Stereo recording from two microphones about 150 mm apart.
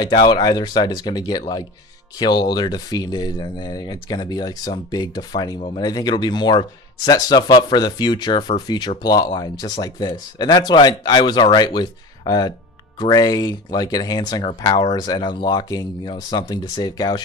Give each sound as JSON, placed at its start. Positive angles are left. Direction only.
{"t": 0.0, "sound": "speech", "side_deg": 30}